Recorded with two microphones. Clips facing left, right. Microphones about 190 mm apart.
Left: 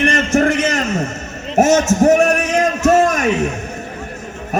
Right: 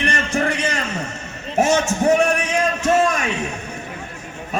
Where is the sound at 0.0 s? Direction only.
45° left (ahead or behind).